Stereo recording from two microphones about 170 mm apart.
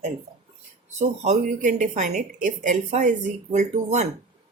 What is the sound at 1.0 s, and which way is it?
A woman's voice, 40° right (ahead or behind).